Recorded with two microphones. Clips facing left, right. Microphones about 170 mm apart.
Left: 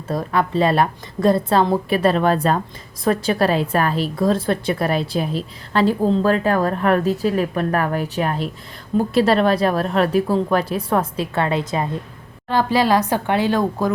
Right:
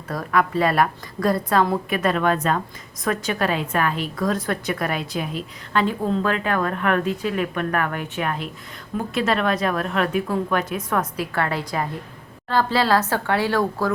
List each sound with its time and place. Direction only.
0.1 s a woman's voice: 25° left (ahead or behind)